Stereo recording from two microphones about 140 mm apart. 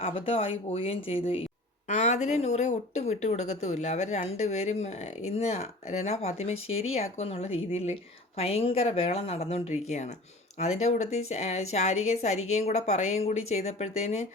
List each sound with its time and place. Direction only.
0.0 s speech: 45° left (ahead or behind)
1.9 s speech: 55° left (ahead or behind)